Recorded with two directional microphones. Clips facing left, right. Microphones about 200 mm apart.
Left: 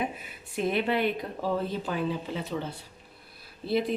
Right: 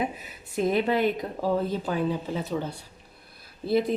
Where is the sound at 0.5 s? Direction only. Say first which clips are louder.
Right 3 dB; 40° right (ahead or behind).